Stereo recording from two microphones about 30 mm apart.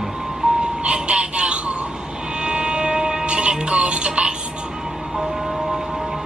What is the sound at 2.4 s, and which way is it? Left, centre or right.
Music, right.